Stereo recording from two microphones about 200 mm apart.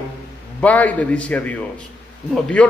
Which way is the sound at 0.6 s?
5° left (ahead or behind).